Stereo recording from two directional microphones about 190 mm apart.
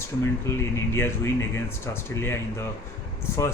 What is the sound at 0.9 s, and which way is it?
Speech, 15° left (ahead or behind).